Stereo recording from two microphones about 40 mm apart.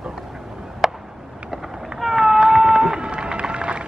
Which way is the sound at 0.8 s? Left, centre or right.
Centre.